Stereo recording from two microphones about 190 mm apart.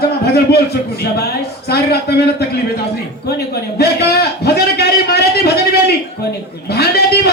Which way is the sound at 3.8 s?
60° left (ahead or behind).